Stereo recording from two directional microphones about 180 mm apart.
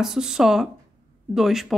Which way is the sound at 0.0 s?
5° right (ahead or behind).